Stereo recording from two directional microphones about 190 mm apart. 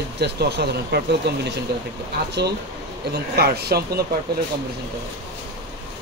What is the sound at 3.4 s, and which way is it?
Speech, 55° right (ahead or behind).